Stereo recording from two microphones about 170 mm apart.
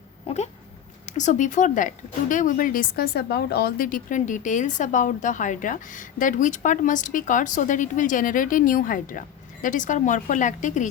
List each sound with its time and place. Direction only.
1.0 s a woman's voice: 45° left (ahead or behind)